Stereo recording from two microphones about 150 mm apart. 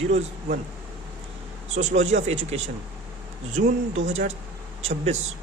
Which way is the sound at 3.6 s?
65° right (ahead or behind).